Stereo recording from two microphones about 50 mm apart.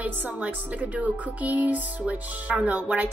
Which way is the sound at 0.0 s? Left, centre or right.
Right.